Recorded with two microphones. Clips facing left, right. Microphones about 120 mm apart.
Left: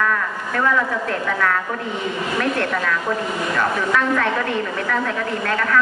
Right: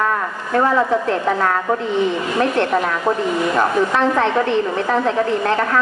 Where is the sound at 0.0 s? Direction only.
35° right (ahead or behind).